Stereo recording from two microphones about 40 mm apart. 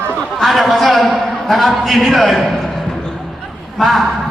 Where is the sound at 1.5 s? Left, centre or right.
Centre.